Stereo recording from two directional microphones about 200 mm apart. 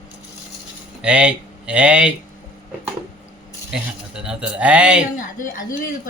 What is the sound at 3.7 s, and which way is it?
Speech, 5° right (ahead or behind).